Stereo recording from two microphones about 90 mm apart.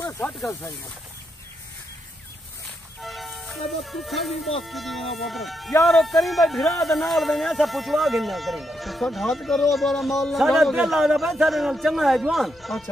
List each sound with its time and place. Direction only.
0.4 s speech: 30° left (ahead or behind)
3.0 s music: centre (ahead or behind)
4.6 s speech: centre (ahead or behind)